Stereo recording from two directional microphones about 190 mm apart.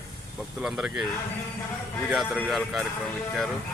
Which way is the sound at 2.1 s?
Centre (ahead or behind).